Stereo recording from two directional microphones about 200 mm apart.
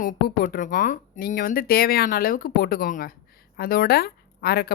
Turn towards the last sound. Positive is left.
turn(degrees=50)  # may be behind; listen again after turning